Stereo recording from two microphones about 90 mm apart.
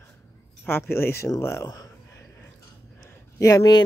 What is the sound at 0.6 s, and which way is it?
Speech, 25° left (ahead or behind).